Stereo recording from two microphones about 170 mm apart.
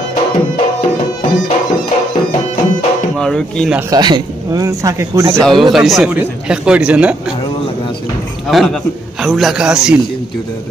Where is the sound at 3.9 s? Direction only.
25° right (ahead or behind).